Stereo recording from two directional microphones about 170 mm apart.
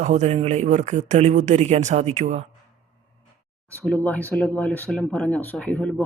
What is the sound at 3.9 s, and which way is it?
Speech, 10° left (ahead or behind).